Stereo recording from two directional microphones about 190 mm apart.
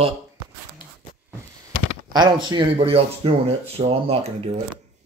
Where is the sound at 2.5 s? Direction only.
25° right (ahead or behind).